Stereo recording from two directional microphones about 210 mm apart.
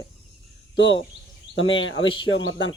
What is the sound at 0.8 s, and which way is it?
Speech, 60° left (ahead or behind).